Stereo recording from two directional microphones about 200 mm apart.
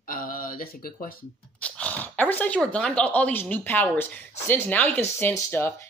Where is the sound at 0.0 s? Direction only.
45° left (ahead or behind).